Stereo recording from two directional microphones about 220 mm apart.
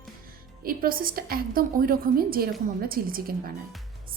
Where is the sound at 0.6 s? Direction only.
40° right (ahead or behind).